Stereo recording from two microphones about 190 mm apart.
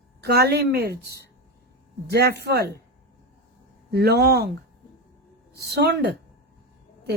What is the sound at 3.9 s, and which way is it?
Speech, 55° right (ahead or behind).